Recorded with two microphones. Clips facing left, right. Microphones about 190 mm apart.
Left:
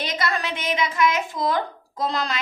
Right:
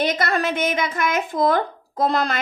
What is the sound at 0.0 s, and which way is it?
A child's voice, 50° right (ahead or behind).